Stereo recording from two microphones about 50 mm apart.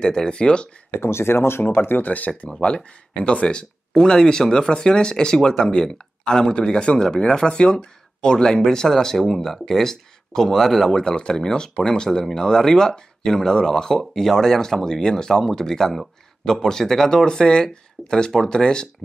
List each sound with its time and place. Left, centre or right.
0.0 s speech: centre
1.0 s speech: left
2.5 s speech: centre
11.1 s speech: centre